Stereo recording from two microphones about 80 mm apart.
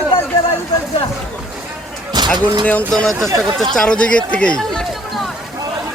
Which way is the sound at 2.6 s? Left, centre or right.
Centre.